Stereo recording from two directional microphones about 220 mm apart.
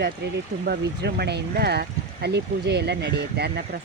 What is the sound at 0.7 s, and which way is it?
Speech, 50° right (ahead or behind).